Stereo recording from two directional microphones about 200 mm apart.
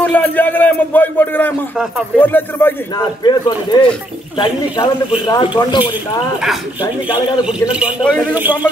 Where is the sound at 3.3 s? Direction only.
20° left (ahead or behind).